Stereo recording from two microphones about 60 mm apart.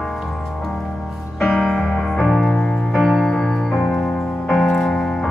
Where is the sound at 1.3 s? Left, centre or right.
Centre.